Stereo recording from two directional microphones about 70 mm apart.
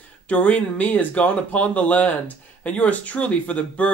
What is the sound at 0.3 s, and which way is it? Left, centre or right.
Speech, left.